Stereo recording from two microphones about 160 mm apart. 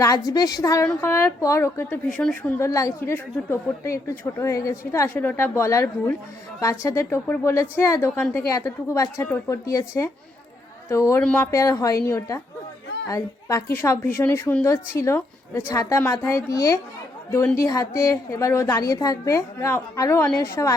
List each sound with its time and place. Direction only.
0.3 s a woman's voice: 25° left (ahead or behind)
11.2 s a woman's voice: 5° left (ahead or behind)
11.5 s a woman's voice: 20° left (ahead or behind)